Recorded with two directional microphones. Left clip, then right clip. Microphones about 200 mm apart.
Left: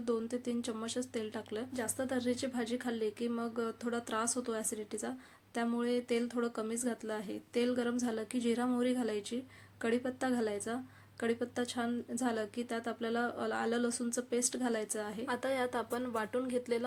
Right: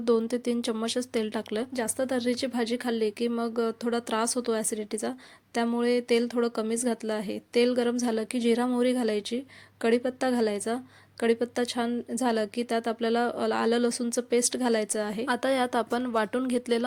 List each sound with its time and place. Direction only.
0.0 s speech: 40° right (ahead or behind)